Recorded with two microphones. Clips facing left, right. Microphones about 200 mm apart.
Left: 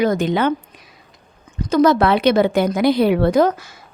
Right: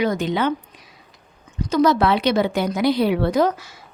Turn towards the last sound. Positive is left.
turn(degrees=50)  # may be behind; listen again after turning